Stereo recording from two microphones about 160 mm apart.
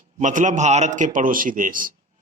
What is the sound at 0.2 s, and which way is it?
A man's voice, 50° right (ahead or behind).